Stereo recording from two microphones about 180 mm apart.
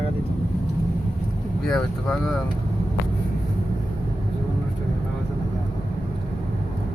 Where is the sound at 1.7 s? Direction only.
5° left (ahead or behind).